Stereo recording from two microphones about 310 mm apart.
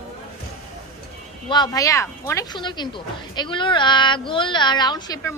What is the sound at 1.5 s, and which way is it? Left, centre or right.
Speech, centre.